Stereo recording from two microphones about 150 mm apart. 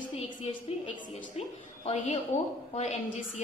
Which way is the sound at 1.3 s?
45° left (ahead or behind).